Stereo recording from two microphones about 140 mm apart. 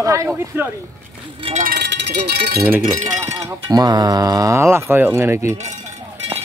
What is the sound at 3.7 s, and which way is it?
Speech, 30° right (ahead or behind).